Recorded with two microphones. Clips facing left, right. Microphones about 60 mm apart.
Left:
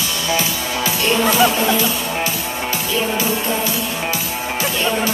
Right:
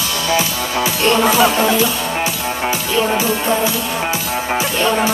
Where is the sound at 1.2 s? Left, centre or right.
Centre.